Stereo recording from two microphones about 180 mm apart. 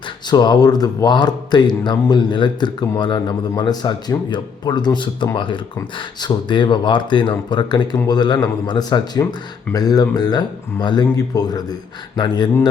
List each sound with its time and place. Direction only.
0.3 s speech: 25° left (ahead or behind)